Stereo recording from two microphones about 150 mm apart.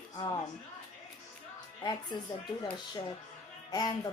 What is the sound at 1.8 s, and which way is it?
Speech, 30° left (ahead or behind).